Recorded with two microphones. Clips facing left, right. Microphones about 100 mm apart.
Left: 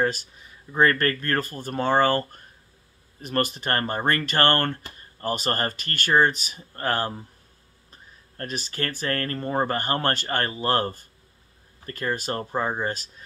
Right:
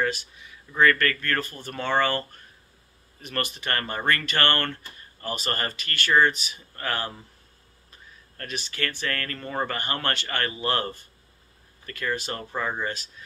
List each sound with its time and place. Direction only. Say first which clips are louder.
0.0 s speech: left 2 dB; 40° left (ahead or behind)